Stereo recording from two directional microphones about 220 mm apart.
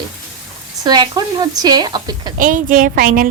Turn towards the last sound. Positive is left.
turn(degrees=-40)  # may be behind; listen again after turning